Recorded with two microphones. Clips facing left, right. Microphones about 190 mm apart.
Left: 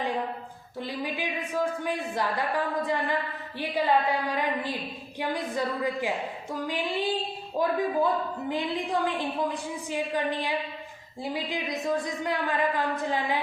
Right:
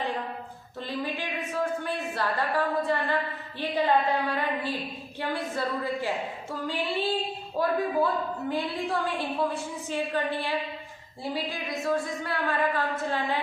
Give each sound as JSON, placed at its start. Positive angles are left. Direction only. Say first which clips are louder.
{"t": 0.8, "sound": "a woman's voice", "louder": "even", "side_deg": 10}